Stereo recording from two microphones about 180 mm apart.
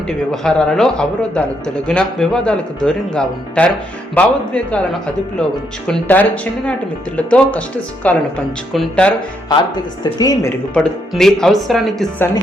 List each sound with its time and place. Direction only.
0.3 s a man's voice: 5° left (ahead or behind)
10.0 s a woman's voice: 20° left (ahead or behind)
10.8 s a man's voice: centre (ahead or behind)